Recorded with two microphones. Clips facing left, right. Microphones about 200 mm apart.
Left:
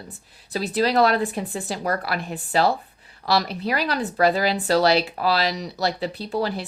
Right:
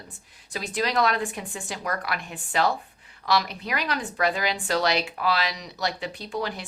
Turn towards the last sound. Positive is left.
turn(degrees=35)  # may be behind; listen again after turning